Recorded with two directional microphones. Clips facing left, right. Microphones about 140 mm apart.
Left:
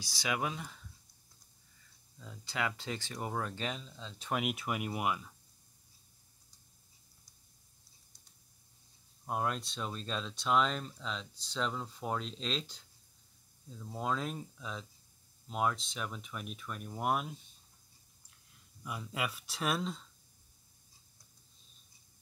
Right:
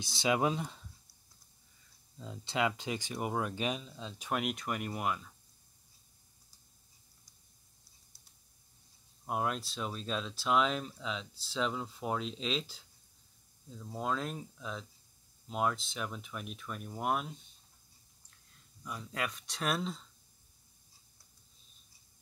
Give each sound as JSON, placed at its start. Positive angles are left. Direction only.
{"t": 0.0, "sound": "speech", "side_deg": -25}
{"t": 2.1, "sound": "speech", "side_deg": -25}
{"t": 4.3, "sound": "speech", "side_deg": 5}
{"t": 9.2, "sound": "speech", "side_deg": -5}
{"t": 18.9, "sound": "speech", "side_deg": 5}